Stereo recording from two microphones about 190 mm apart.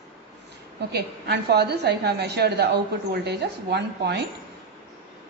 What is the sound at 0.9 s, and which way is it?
Speech, 60° right (ahead or behind).